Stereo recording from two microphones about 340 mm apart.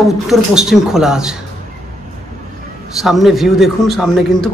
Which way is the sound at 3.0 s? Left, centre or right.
Centre.